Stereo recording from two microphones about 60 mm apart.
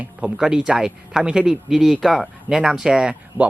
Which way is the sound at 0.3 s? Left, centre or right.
Centre.